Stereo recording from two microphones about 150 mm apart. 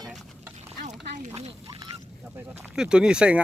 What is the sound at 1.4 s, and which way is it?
Speech, 45° right (ahead or behind).